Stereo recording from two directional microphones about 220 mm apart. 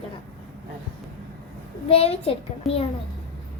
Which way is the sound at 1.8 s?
25° left (ahead or behind).